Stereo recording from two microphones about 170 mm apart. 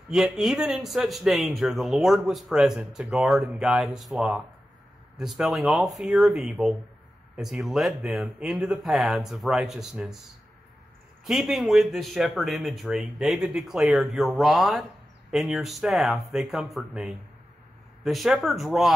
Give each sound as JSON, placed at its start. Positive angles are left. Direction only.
{"t": 0.1, "sound": "speech", "side_deg": 0}
{"t": 11.2, "sound": "speech", "side_deg": 0}